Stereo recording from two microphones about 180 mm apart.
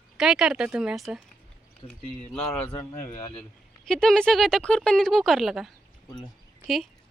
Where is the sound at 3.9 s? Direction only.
5° left (ahead or behind).